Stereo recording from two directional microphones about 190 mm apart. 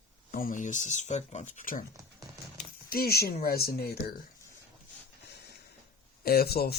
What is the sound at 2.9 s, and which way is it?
Speech, 55° left (ahead or behind).